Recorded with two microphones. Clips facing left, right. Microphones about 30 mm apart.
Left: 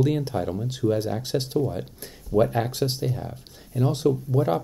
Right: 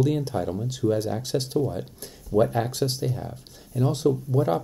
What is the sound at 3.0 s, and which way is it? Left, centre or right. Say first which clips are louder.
Speech: left 1 dB; centre.